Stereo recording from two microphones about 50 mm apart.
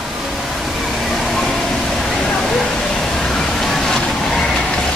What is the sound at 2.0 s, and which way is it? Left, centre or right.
Waterfall, centre.